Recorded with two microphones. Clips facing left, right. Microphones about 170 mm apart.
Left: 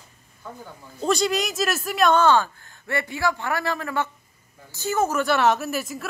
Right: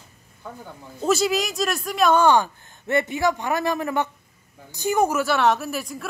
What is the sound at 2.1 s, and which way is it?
Speech, 15° right (ahead or behind).